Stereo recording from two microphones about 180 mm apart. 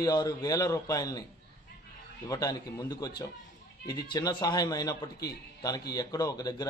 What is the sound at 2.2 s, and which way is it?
Speech, 20° left (ahead or behind).